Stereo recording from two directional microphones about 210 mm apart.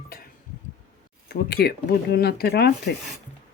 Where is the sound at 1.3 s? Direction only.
50° left (ahead or behind).